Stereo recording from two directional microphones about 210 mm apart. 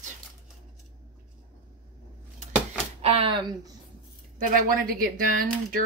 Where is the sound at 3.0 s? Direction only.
25° right (ahead or behind).